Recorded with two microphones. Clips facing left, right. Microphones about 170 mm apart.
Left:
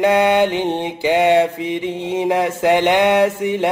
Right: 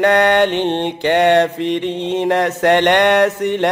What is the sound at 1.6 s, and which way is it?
Speech, 70° right (ahead or behind).